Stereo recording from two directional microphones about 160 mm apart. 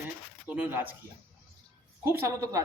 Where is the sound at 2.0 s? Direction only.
15° right (ahead or behind).